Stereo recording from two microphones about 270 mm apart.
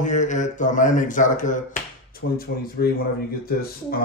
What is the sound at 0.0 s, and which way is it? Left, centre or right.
Speech, left.